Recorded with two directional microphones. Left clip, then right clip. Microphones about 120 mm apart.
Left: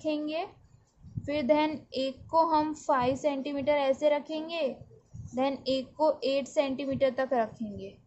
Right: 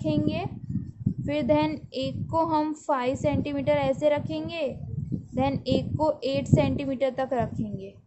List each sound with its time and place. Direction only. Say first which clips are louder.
0.0 s a woman's voice: right 3 dB; 15° right (ahead or behind)